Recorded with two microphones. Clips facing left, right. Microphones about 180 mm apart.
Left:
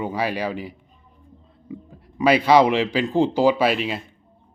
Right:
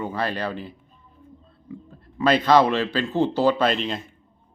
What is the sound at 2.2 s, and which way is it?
Speech, 10° left (ahead or behind).